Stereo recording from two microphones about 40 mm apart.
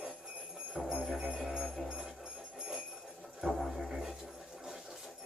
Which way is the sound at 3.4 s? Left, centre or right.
Centre.